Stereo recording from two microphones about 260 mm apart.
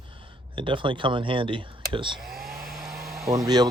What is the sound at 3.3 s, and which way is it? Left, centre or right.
Speech, centre.